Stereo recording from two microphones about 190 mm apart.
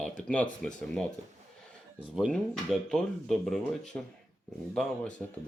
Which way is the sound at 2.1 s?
Centre (ahead or behind).